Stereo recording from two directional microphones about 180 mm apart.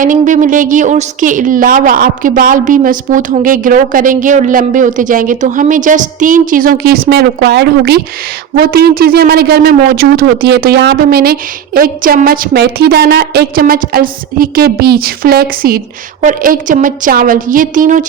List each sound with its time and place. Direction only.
0.0 s a woman's voice: 45° right (ahead or behind)